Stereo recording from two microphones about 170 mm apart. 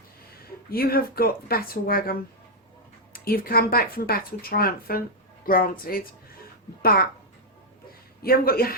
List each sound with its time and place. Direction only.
0.4 s speech: 65° left (ahead or behind)
6.8 s speech: 65° left (ahead or behind)
8.2 s speech: 60° left (ahead or behind)